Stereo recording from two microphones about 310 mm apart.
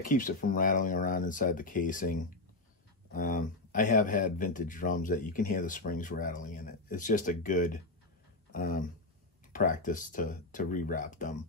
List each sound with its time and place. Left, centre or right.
0.0 s speech: left